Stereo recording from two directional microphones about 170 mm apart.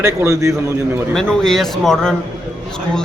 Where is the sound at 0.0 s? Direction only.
15° right (ahead or behind).